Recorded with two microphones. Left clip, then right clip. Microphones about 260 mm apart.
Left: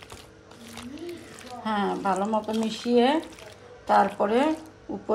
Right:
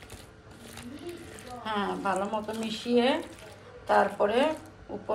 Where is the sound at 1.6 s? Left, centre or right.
Left.